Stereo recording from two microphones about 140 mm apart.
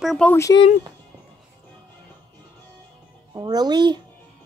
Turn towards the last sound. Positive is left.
turn(degrees=-30)  # may be behind; listen again after turning